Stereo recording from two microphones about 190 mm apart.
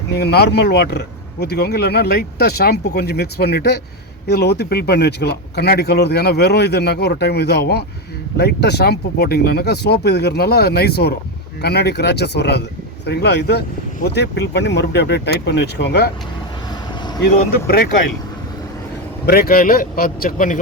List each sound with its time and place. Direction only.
0.1 s speech: 60° left (ahead or behind)
19.2 s a man's voice: 50° left (ahead or behind)